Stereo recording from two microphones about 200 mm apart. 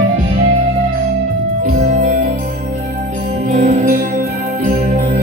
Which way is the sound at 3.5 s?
30° right (ahead or behind).